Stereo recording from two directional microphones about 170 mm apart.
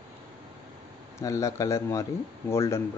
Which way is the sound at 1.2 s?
20° left (ahead or behind).